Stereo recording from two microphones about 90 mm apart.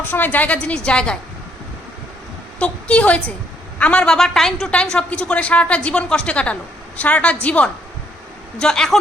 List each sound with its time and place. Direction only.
0.1 s a woman's voice: 20° left (ahead or behind)
2.6 s a woman's voice: 15° left (ahead or behind)